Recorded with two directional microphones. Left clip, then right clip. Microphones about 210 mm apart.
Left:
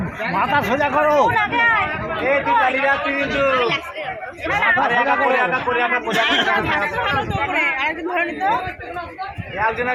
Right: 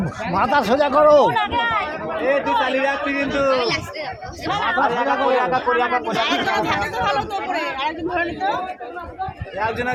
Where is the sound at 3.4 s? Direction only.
50° right (ahead or behind).